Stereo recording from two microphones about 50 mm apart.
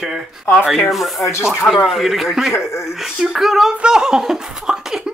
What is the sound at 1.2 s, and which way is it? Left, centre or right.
Speech, left.